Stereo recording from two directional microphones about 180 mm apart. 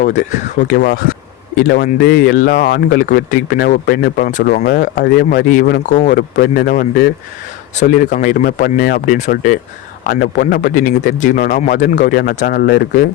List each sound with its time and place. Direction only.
0.0 s speech: 45° left (ahead or behind); by 13.1 s 65° left (ahead or behind)